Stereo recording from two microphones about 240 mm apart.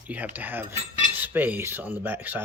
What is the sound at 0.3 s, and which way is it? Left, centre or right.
Speech, centre.